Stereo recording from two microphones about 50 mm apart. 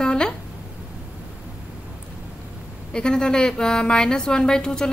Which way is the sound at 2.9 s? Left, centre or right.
Centre.